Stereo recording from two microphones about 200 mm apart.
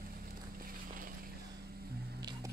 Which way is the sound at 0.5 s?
45° right (ahead or behind).